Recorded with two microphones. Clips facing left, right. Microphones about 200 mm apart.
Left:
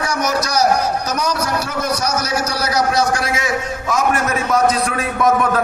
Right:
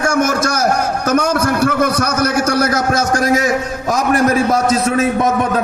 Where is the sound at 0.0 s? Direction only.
50° right (ahead or behind).